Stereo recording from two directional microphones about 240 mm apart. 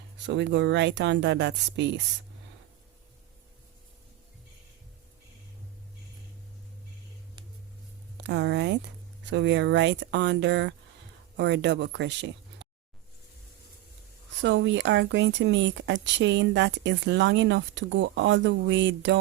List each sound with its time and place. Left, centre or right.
0.3 s speech: right
8.2 s speech: right
14.4 s speech: right